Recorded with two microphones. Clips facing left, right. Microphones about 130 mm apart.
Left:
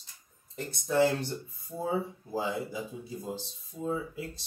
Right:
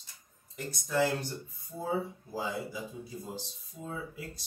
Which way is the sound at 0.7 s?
30° left (ahead or behind).